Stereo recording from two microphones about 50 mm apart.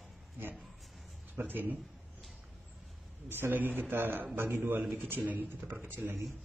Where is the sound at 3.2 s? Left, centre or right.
Right.